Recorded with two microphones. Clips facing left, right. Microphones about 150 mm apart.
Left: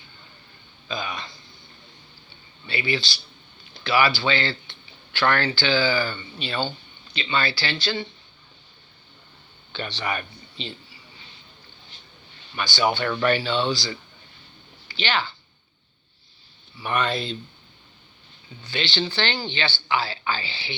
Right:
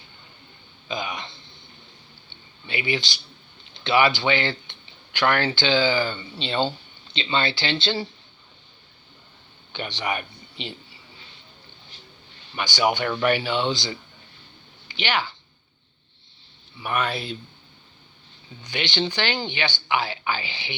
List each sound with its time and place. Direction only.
0.9 s speech: 20° right (ahead or behind)
2.6 s speech: 15° right (ahead or behind)
9.7 s speech: 15° right (ahead or behind)
12.5 s speech: 15° right (ahead or behind)
16.8 s speech: 5° right (ahead or behind)
18.6 s speech: 15° right (ahead or behind)